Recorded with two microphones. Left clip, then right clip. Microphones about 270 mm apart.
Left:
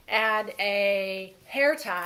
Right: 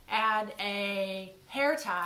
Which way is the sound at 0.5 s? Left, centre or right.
Right.